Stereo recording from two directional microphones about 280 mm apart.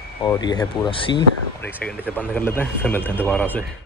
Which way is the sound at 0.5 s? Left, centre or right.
Centre.